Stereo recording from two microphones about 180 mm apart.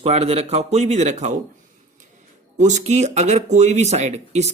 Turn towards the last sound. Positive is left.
turn(degrees=-40)  # may be behind; listen again after turning